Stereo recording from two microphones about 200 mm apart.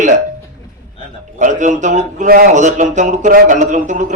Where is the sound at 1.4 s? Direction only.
35° right (ahead or behind).